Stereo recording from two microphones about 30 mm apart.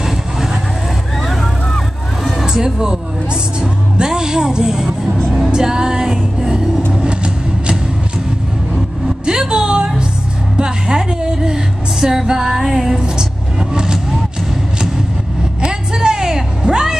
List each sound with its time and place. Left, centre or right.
1.2 s vehicle: centre
2.4 s a sound: right
3.6 s music: right
7.0 s vehicle: right
9.5 s music: right
10.6 s a sound: right
12.4 s music: centre
13.0 s vehicle: right
15.6 s vehicle: right
16.6 s a sound: right